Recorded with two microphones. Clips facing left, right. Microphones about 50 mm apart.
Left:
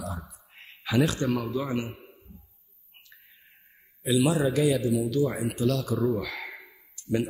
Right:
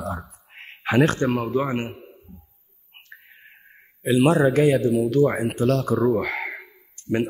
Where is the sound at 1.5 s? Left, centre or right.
Right.